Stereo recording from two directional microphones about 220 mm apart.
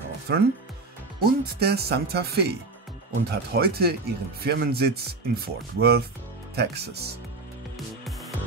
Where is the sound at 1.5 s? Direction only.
45° right (ahead or behind).